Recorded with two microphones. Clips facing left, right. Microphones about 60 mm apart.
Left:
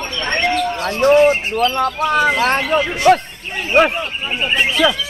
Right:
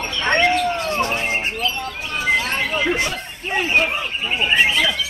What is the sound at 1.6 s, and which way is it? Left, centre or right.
Speech, left.